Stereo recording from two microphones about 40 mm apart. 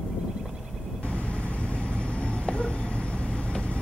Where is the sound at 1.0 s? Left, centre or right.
Left.